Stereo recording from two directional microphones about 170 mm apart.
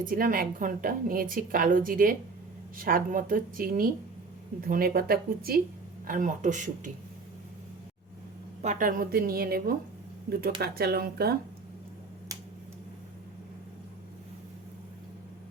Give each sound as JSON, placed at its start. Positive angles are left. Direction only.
{"t": 0.0, "sound": "a woman's voice", "side_deg": -55}
{"t": 6.1, "sound": "speech", "side_deg": -50}
{"t": 8.6, "sound": "a woman's voice", "side_deg": -50}